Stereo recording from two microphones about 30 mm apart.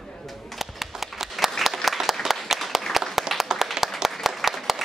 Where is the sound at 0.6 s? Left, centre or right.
Centre.